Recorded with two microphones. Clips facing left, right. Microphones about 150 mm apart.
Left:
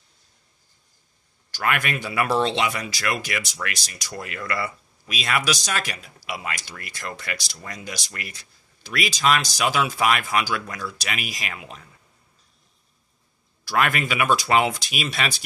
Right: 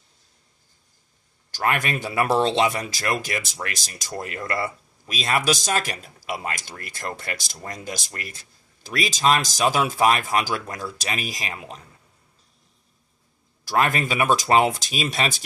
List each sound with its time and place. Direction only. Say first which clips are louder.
1.5 s speech: right 1 dB; 35° right (ahead or behind)
4.1 s speech: right 2 dB; 30° right (ahead or behind)
13.7 s speech: right 1 dB; 35° right (ahead or behind)